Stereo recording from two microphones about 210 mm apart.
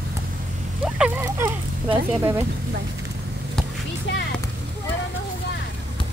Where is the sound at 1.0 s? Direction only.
10° right (ahead or behind).